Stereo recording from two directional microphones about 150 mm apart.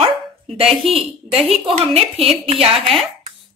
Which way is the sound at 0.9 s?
40° right (ahead or behind).